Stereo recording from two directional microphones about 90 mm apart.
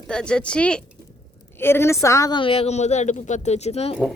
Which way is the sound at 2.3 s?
80° left.